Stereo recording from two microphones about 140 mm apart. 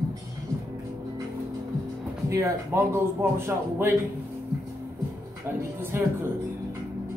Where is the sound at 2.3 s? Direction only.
20° right (ahead or behind).